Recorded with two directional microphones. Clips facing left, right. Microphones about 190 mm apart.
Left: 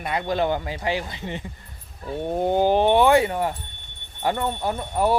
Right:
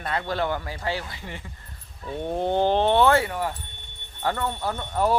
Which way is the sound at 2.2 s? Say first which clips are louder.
Left 2 dB; 10° left (ahead or behind).